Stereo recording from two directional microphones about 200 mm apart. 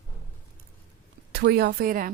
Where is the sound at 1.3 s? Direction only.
55° right (ahead or behind).